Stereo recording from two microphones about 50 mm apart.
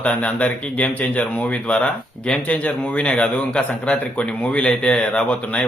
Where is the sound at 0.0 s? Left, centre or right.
Left.